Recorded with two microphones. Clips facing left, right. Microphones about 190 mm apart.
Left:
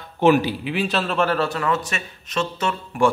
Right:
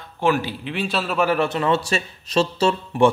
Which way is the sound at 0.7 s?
Centre (ahead or behind).